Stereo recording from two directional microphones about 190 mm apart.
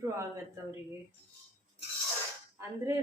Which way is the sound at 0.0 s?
15° right (ahead or behind).